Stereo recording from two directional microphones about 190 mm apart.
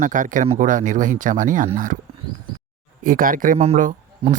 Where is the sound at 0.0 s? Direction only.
45° right (ahead or behind).